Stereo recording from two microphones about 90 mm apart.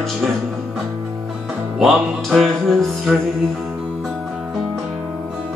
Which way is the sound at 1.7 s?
Centre (ahead or behind).